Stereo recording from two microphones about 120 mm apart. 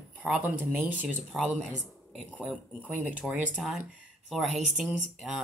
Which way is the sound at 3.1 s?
10° right (ahead or behind).